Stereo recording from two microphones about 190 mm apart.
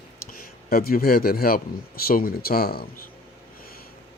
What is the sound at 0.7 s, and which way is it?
Speech, 50° left (ahead or behind).